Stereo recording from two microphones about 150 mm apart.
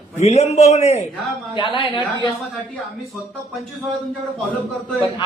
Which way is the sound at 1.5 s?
35° left (ahead or behind).